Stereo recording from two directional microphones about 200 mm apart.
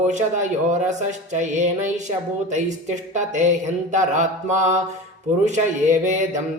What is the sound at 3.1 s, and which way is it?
Speech, 35° right (ahead or behind).